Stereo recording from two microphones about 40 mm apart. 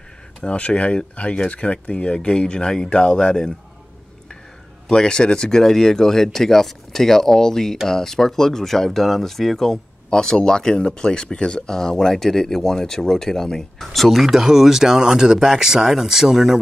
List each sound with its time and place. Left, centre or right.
0.4 s speech: left
4.8 s speech: centre